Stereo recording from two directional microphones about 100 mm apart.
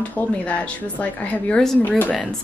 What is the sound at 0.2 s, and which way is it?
A woman's voice, 15° left (ahead or behind).